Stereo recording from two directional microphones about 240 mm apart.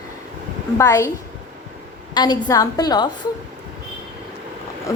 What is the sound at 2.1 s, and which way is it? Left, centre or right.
Speech, centre.